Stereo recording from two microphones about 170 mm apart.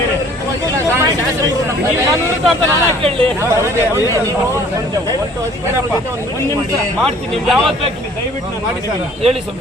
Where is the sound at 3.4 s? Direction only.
15° right (ahead or behind).